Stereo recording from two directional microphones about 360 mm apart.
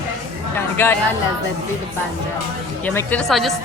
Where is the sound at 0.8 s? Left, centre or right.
Centre.